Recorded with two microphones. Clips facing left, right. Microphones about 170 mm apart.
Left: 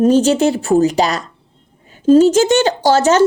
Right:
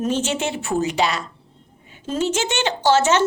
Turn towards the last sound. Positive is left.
turn(degrees=40)  # may be behind; listen again after turning